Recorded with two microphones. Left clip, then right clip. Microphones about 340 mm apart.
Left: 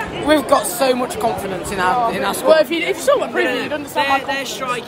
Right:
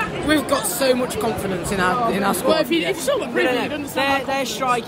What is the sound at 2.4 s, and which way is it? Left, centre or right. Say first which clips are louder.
Speech: left 8 dB; centre.